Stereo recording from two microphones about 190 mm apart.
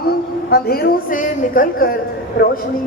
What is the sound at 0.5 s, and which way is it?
A man's voice, 55° left (ahead or behind).